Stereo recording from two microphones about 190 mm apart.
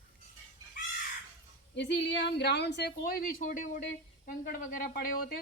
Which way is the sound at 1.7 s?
70° left (ahead or behind).